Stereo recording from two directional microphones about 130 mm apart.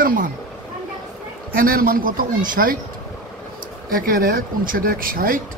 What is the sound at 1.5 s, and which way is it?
Speech, 90° right.